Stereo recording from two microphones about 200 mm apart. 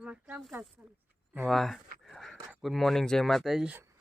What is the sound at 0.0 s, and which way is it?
Speech, 5° right (ahead or behind).